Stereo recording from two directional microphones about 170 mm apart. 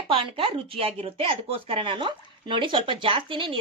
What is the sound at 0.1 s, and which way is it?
Speech, 30° right (ahead or behind).